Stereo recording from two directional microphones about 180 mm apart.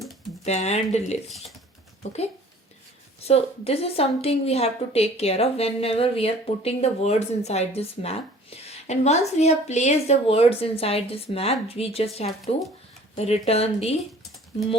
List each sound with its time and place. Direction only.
0.4 s a woman's voice: 35° left (ahead or behind)
3.2 s a woman's voice: 35° left (ahead or behind)
13.1 s a woman's voice: 35° left (ahead or behind)